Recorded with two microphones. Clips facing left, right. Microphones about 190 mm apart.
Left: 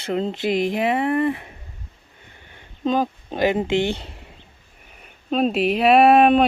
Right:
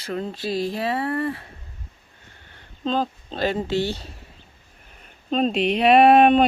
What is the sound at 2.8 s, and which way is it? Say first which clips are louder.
Speech: left 3 dB; 15° left (ahead or behind).